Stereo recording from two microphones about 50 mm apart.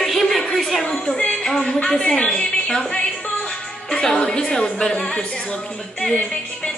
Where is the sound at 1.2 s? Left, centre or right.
Left.